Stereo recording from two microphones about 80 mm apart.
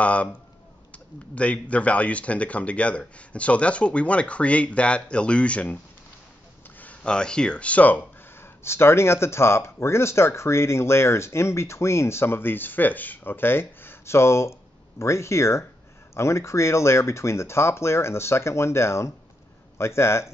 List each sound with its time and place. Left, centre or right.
0.0 s speech: centre
6.8 s speech: centre; by 20.2 s left